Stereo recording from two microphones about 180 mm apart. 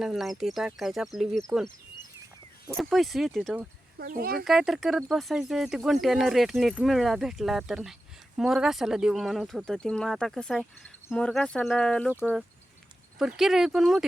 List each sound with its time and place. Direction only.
0.0 s speech: centre (ahead or behind)
2.7 s speech: centre (ahead or behind)
3.9 s speech: 55° right (ahead or behind)
4.4 s speech: centre (ahead or behind)